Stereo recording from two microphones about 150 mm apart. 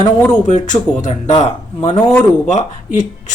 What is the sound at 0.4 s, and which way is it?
Speech, 55° left (ahead or behind).